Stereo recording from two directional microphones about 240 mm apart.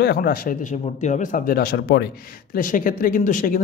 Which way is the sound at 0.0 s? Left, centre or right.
Left.